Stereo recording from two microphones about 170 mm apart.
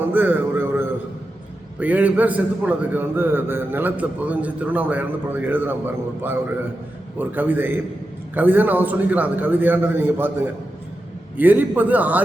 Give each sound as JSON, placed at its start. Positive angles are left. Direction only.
{"t": 0.1, "sound": "a sound", "side_deg": -10}
{"t": 1.8, "sound": "a man's voice", "side_deg": -10}
{"t": 7.2, "sound": "a man's voice", "side_deg": -10}